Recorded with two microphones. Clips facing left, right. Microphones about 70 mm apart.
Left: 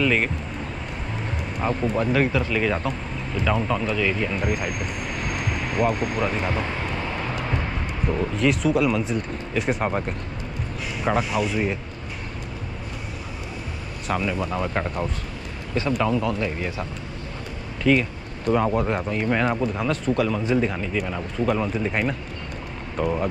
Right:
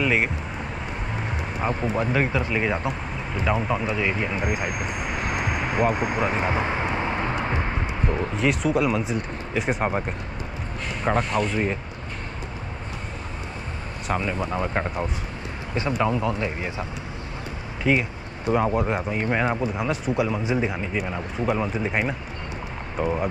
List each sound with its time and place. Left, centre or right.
0.0 s speech: centre
1.6 s speech: centre
7.6 s vehicle: right
8.2 s speech: centre
9.8 s speech: centre
11.0 s speech: centre
14.4 s speech: centre
17.9 s speech: centre